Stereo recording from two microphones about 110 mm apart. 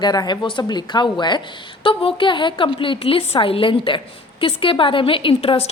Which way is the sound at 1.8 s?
55° left (ahead or behind).